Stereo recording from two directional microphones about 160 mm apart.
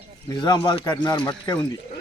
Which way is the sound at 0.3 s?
25° left (ahead or behind).